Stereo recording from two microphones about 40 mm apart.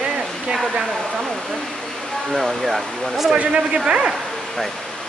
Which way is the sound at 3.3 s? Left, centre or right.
Right.